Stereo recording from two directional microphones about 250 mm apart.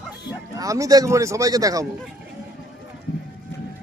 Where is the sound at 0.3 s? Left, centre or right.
Centre.